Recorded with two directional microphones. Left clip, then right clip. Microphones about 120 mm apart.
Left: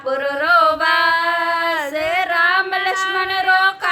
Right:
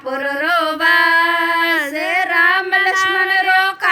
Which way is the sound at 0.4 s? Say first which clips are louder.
Left 2 dB; 45° right (ahead or behind).